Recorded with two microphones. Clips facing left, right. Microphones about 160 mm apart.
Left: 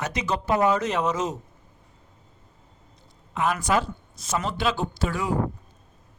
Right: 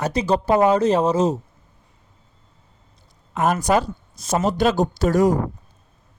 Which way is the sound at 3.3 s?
45° right (ahead or behind).